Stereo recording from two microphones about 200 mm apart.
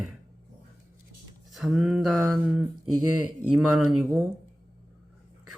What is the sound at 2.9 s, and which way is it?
Speech, 90° right.